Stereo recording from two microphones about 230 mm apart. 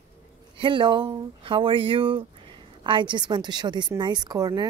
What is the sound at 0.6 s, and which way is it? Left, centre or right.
A woman's voice, right.